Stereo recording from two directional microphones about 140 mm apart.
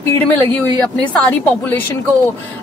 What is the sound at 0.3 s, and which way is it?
A woman's voice, 10° left (ahead or behind).